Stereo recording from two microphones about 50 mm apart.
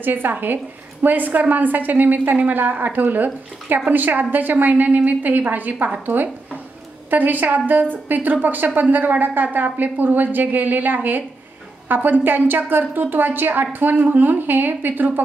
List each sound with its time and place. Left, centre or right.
0.0 s a woman's voice: right